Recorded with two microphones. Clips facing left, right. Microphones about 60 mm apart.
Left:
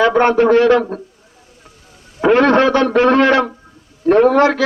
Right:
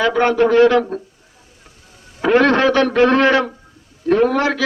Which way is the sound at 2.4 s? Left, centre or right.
Left.